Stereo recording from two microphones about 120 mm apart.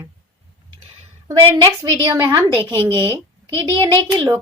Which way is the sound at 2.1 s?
25° right (ahead or behind).